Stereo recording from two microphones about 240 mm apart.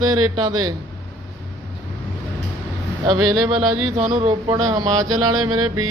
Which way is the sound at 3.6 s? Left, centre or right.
Right.